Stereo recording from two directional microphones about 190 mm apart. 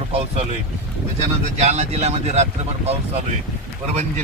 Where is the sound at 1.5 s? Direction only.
35° right (ahead or behind).